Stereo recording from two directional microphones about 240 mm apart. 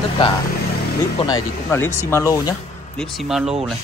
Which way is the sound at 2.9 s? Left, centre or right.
Centre.